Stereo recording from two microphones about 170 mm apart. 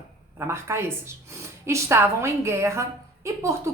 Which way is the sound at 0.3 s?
15° right (ahead or behind).